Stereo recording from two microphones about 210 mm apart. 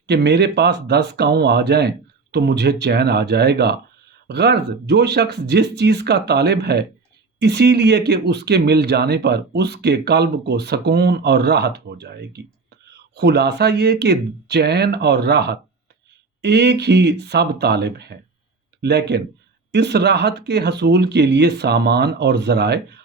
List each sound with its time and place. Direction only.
0.1 s speech: 50° right (ahead or behind)